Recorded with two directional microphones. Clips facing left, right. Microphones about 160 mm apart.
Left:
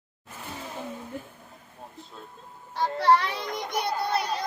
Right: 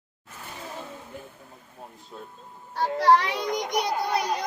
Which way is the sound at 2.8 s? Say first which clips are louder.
Right 2 dB; 10° right (ahead or behind).